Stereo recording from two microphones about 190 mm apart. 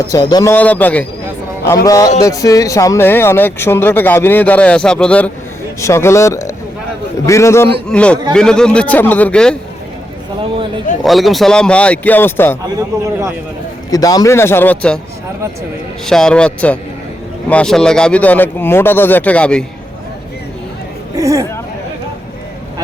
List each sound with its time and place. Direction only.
0.0 s a man's voice: 20° left (ahead or behind)
0.5 s speech: 10° left (ahead or behind)
11.0 s speech: centre (ahead or behind)
12.6 s a man's voice: 20° right (ahead or behind)
13.9 s speech: 20° left (ahead or behind)
16.0 s speech: 5° left (ahead or behind)
21.2 s speech: 15° right (ahead or behind)